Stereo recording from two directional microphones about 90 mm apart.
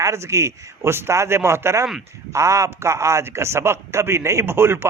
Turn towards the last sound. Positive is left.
turn(degrees=-25)  # may be behind; listen again after turning